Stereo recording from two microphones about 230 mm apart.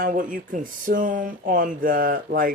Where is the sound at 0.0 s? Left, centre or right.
Right.